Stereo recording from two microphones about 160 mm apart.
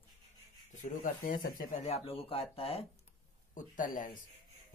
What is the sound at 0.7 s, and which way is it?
Speech, 55° left (ahead or behind).